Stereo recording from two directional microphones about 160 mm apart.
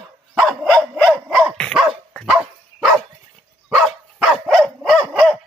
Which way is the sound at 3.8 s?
Centre (ahead or behind).